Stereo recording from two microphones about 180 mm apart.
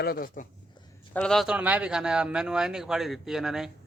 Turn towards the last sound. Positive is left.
turn(degrees=0)  # may be behind; listen again after turning